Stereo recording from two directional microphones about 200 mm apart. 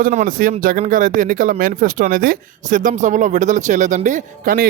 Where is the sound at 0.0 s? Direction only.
40° right (ahead or behind).